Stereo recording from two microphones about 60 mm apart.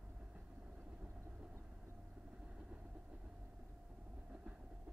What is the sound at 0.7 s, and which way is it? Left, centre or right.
Vehicle, right.